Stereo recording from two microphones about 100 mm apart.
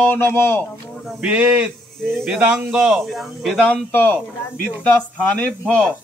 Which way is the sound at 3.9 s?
20° left (ahead or behind).